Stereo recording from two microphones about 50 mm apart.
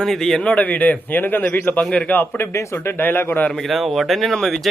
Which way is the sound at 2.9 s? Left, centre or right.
Left.